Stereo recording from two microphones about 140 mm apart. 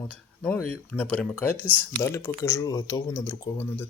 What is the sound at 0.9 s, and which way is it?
Speech, 10° left (ahead or behind).